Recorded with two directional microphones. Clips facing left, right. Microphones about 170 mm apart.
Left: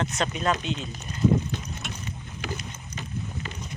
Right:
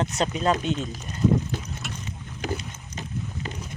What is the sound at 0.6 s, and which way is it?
Speech, 45° right (ahead or behind).